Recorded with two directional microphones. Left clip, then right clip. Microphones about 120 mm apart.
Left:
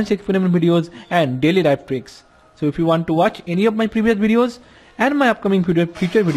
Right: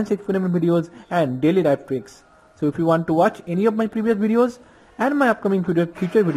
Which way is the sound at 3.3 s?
55° left (ahead or behind).